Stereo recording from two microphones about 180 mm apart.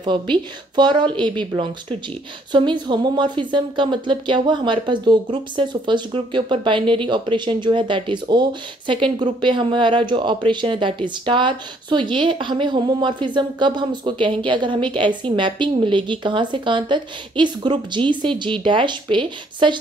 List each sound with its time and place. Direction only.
0.0 s speech: 25° right (ahead or behind)